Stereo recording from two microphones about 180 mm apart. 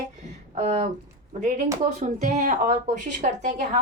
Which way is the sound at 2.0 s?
40° right (ahead or behind).